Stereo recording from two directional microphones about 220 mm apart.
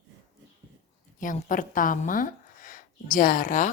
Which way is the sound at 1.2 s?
35° left (ahead or behind).